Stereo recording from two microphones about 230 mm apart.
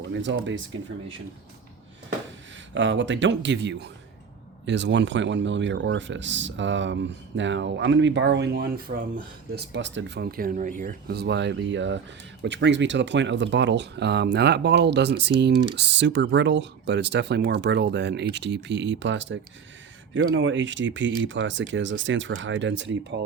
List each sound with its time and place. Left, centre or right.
0.1 s speech: right
2.7 s speech: right